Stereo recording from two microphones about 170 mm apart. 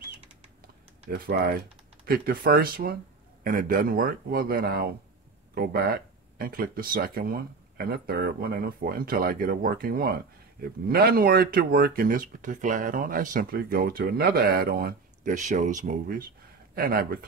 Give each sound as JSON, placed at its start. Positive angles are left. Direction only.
{"t": 1.1, "sound": "speech", "side_deg": -65}